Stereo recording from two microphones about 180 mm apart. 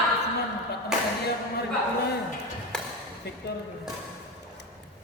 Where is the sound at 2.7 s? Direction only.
5° left (ahead or behind).